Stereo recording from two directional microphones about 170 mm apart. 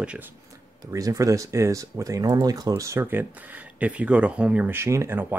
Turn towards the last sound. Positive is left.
turn(degrees=-10)  # may be behind; listen again after turning